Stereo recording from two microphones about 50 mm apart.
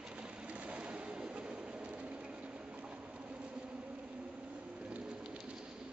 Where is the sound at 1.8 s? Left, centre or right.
Right.